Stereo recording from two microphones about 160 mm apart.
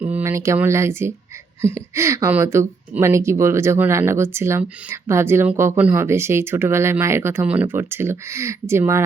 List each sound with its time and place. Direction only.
0.0 s speech: 10° right (ahead or behind)